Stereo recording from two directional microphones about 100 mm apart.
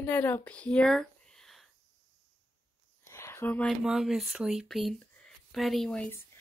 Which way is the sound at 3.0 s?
25° left (ahead or behind).